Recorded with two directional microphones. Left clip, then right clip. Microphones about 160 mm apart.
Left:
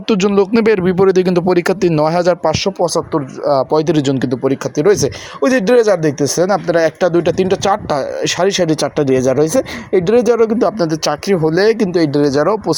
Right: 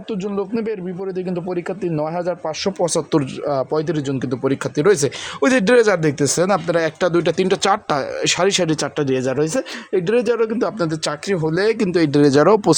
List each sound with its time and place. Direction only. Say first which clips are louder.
0.1 s speech: left 11 dB; 45° left (ahead or behind)
2.6 s speech: left 4 dB; centre (ahead or behind); by 4.3 s 25° left (ahead or behind)
4.3 s speech: left 4 dB; 10° left (ahead or behind)
11.8 s speech: left 3 dB; centre (ahead or behind)
12.2 s speech: even; 50° right (ahead or behind)